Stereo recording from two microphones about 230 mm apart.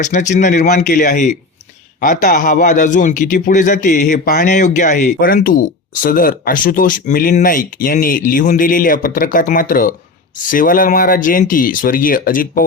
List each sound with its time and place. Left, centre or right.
0.0 s a man's voice: left